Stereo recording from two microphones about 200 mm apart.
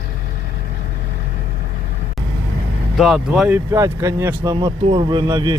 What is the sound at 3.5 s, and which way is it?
Speech, 15° right (ahead or behind).